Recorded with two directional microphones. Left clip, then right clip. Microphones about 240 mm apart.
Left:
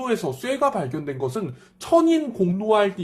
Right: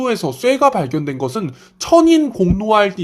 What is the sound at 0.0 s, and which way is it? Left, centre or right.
Speech, right.